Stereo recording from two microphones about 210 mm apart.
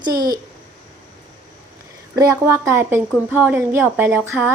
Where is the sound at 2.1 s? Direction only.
15° right (ahead or behind).